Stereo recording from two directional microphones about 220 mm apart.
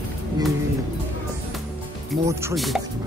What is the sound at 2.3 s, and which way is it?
Speech, 10° right (ahead or behind).